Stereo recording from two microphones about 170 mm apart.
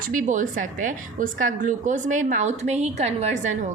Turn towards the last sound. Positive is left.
turn(degrees=-45)  # may be behind; listen again after turning